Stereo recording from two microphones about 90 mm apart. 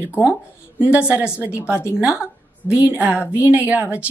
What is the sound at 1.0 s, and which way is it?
A woman's voice, 10° right (ahead or behind).